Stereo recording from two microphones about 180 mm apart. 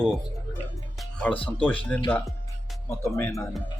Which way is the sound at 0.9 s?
10° left (ahead or behind).